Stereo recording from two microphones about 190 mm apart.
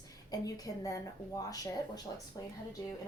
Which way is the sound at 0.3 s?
20° left (ahead or behind).